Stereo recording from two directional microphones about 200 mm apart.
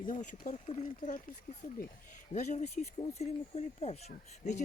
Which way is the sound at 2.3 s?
35° left (ahead or behind).